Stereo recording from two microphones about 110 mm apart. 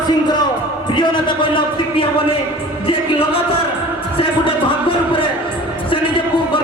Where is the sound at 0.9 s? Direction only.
45° left (ahead or behind).